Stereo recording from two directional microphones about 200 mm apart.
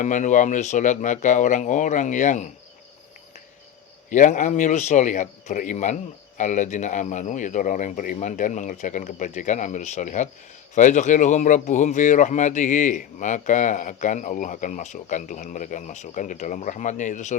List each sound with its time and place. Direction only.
0.0 s speech: 40° left (ahead or behind)
4.1 s speech: 40° left (ahead or behind)